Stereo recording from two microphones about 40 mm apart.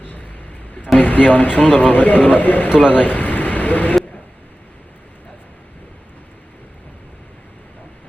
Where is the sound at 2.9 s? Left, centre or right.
Left.